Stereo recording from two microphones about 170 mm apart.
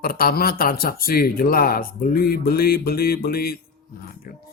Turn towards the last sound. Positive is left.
turn(degrees=65)  # may be behind; listen again after turning